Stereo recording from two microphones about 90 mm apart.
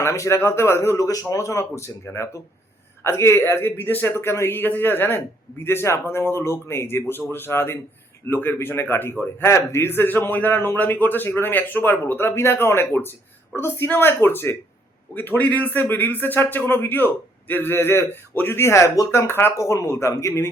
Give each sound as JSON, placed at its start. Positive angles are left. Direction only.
{"t": 0.0, "sound": "a man's voice", "side_deg": 30}